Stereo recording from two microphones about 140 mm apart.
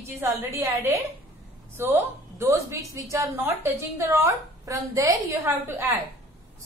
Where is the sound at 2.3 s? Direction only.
20° right (ahead or behind).